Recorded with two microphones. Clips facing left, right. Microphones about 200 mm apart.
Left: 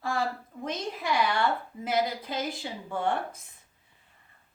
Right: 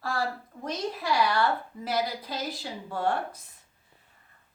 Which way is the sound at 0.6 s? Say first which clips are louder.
Right 1 dB; 20° left (ahead or behind).